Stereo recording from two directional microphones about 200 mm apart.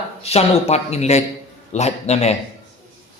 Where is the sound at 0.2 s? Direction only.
30° left (ahead or behind).